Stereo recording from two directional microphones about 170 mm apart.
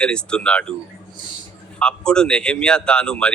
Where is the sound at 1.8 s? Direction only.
5° left (ahead or behind).